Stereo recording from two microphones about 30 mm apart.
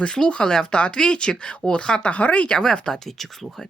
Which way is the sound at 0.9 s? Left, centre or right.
Left.